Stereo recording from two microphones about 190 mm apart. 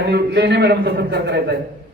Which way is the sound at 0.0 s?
60° right (ahead or behind).